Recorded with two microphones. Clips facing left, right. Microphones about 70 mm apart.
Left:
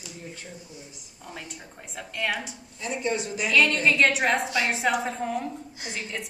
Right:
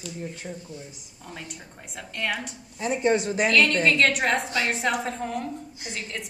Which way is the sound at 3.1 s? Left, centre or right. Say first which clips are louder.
Right 7 dB; right.